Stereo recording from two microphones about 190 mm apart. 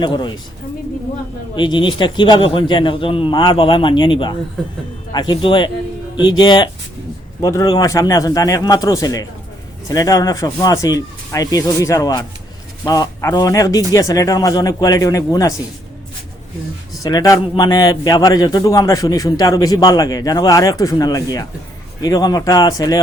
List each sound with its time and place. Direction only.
0.0 s a man's voice: 25° left (ahead or behind)
1.5 s a man's voice: 25° left (ahead or behind)
17.0 s a man's voice: 20° left (ahead or behind)